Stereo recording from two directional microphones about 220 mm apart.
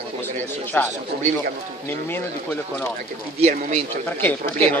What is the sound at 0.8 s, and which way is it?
Speech, 5° left (ahead or behind).